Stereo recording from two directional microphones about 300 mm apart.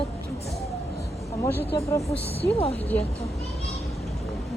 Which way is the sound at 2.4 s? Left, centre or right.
Centre.